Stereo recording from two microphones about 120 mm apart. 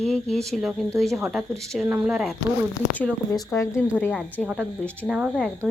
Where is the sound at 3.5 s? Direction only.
25° left (ahead or behind).